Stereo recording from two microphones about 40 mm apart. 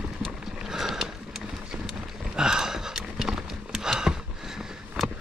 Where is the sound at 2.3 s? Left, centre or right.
Centre.